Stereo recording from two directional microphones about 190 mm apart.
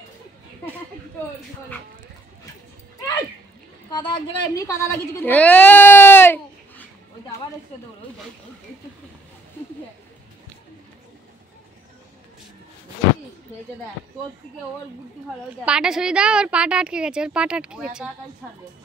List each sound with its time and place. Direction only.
3.9 s speech: 25° left (ahead or behind)
15.6 s a woman's voice: 5° right (ahead or behind)